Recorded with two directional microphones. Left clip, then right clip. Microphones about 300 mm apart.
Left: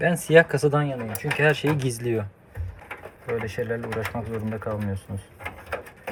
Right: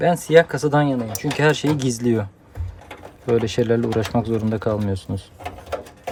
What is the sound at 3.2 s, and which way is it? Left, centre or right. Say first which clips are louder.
Speech: right 9 dB; right.